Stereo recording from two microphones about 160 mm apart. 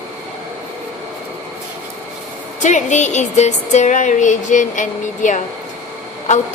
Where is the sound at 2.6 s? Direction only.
50° left (ahead or behind).